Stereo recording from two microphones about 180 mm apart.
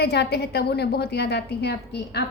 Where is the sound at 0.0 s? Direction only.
65° left (ahead or behind).